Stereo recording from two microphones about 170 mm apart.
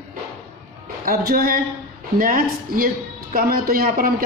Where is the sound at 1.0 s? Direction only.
60° right (ahead or behind).